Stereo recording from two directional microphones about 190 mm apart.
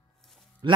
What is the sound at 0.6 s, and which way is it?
Speech, 25° right (ahead or behind).